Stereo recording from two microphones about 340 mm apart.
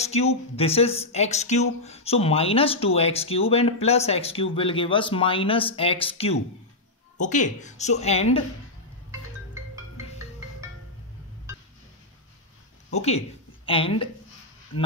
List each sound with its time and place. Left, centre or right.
0.0 s a woman's voice: centre
12.9 s a woman's voice: centre